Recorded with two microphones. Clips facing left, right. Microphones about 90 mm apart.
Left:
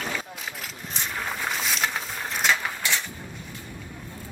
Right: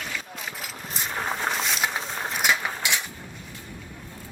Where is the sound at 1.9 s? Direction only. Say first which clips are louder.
Right 1 dB; 10° right (ahead or behind).